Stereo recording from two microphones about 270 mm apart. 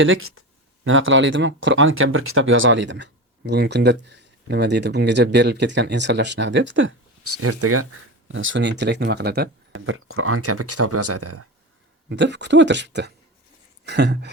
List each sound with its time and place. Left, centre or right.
0.0 s speech: right
8.3 s speech: right
12.0 s speech: right